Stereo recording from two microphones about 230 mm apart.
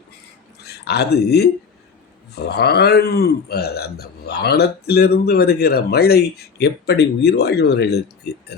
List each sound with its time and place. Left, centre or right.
0.6 s speech: left